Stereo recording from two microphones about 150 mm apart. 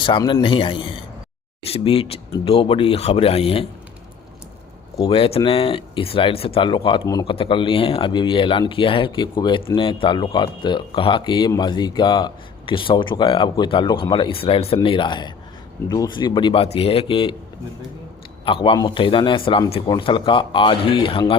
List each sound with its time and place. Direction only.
0.0 s speech: 35° left (ahead or behind)
5.0 s a man's voice: 40° left (ahead or behind)
7.3 s speech: 35° left (ahead or behind)
18.4 s speech: 35° left (ahead or behind)